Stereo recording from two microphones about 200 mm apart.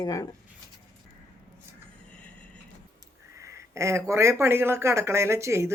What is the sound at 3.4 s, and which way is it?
A woman's voice, 15° right (ahead or behind).